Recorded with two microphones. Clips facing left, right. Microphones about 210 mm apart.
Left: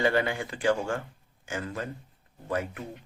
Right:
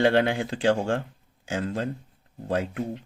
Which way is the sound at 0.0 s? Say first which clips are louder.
Right 5 dB; 75° right (ahead or behind).